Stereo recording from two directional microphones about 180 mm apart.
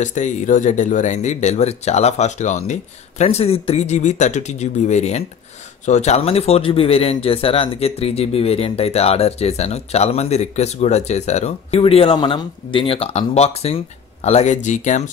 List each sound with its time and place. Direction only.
0.0 s speech: 40° left (ahead or behind)